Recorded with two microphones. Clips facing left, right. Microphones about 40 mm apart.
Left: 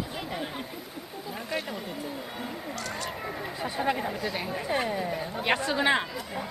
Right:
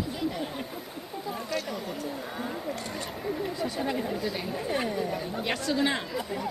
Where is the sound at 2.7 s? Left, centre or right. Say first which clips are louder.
Left 1 dB; right.